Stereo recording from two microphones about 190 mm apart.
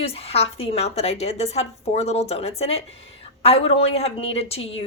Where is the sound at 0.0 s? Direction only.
30° left (ahead or behind).